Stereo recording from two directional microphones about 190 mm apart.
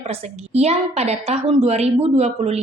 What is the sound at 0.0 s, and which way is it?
A woman's voice, 35° right (ahead or behind).